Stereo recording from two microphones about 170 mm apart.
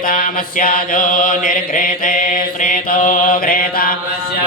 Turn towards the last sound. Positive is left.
turn(degrees=60)  # may be behind; listen again after turning